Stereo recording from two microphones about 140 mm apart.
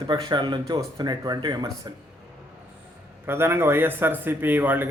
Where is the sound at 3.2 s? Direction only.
15° right (ahead or behind).